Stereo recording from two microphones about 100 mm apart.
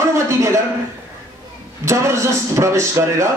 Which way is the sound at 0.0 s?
30° right (ahead or behind).